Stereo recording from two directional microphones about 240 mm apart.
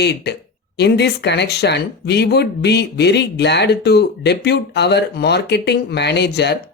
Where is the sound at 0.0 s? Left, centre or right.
Left.